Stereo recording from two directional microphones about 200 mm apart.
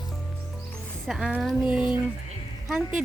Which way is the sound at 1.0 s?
5° right (ahead or behind).